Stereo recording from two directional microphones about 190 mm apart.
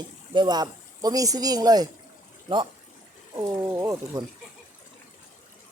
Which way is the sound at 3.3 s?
15° right (ahead or behind).